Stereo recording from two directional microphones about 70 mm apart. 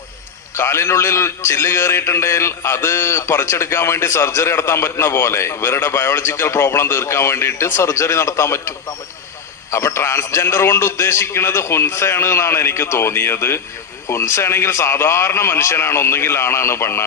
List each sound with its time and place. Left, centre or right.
0.5 s a man's voice: left
9.7 s a man's voice: left